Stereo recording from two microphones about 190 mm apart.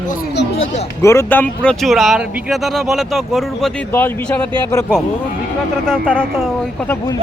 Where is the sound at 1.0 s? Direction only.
15° left (ahead or behind).